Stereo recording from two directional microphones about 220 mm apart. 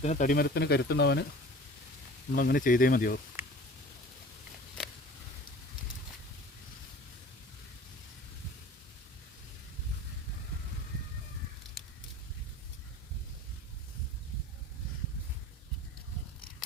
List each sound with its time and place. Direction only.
0.0 s speech: 35° left (ahead or behind); by 1.3 s 50° left (ahead or behind)
2.3 s speech: 40° left (ahead or behind)